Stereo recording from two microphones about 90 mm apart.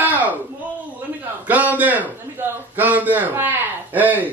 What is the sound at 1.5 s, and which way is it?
A man's voice, 15° right (ahead or behind).